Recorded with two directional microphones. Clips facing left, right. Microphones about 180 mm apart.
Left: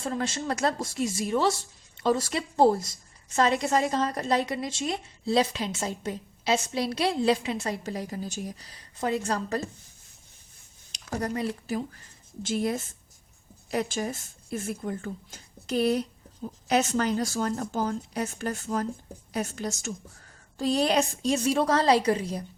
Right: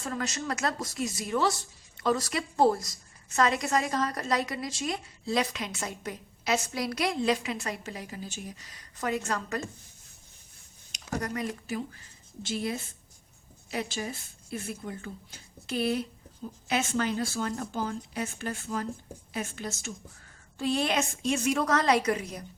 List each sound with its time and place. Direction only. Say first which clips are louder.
0.0 s a woman's voice: left 3 dB; 30° left (ahead or behind)
10.9 s a woman's voice: left 3 dB; 30° left (ahead or behind)
12.4 s a woman's voice: left 4 dB; 50° left (ahead or behind); by 22.4 s 30° left (ahead or behind)